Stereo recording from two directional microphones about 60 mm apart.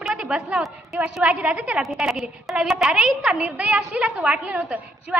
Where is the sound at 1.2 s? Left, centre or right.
Right.